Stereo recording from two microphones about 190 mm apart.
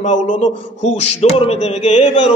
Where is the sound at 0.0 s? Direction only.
40° left (ahead or behind).